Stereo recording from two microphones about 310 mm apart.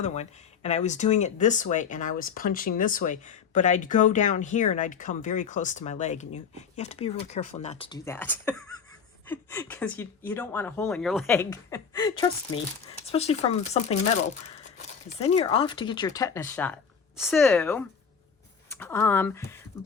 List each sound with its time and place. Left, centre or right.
0.0 s speech: left